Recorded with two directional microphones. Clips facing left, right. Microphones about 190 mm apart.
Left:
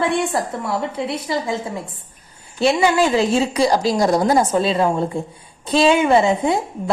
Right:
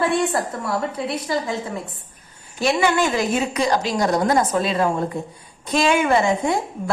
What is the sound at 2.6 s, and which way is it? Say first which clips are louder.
A woman's voice: left 3 dB; 30° left (ahead or behind).